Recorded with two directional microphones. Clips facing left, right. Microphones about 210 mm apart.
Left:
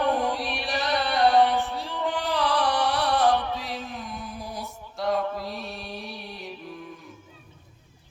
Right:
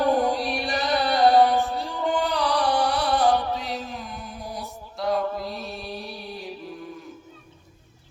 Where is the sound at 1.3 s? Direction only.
40° right (ahead or behind).